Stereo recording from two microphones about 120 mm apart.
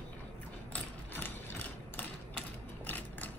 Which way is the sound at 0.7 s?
15° left (ahead or behind).